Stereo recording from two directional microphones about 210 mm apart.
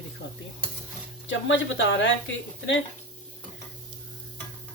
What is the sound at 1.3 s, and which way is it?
Speech, 60° left (ahead or behind).